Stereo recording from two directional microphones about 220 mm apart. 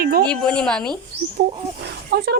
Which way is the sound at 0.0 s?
45° right (ahead or behind).